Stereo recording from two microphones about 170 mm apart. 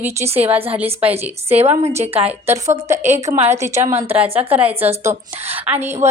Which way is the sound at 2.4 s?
15° right (ahead or behind).